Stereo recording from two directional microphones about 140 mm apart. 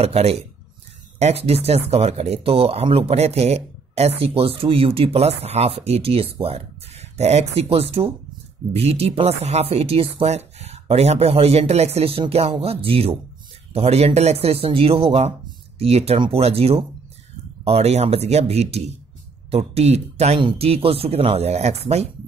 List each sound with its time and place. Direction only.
0.0 s speech: 45° right (ahead or behind)